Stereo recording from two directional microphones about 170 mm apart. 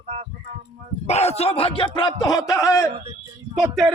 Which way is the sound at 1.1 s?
40° left (ahead or behind).